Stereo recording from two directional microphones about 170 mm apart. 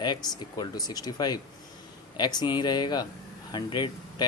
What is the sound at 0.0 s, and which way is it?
Speech, 25° left (ahead or behind).